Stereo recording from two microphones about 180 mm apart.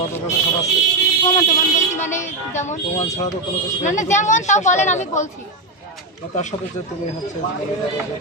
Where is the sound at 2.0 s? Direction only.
40° left (ahead or behind).